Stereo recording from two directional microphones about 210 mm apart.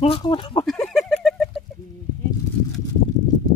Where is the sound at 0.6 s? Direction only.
Centre (ahead or behind).